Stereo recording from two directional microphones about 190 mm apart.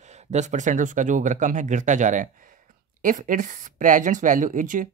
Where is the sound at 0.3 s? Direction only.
40° right (ahead or behind).